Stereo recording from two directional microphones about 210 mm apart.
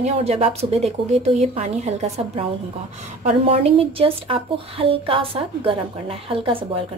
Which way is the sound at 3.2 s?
30° right (ahead or behind).